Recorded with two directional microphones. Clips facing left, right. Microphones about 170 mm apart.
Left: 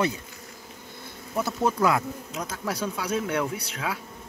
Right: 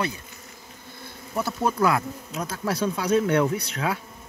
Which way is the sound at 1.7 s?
20° left (ahead or behind).